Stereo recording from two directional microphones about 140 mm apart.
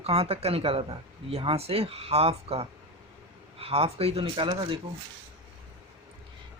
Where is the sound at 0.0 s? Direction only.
45° right (ahead or behind).